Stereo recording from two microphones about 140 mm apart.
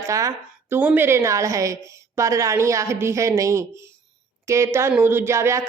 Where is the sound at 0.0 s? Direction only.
25° right (ahead or behind).